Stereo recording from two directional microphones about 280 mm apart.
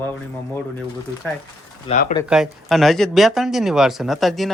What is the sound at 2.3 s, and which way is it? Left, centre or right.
Speech, centre.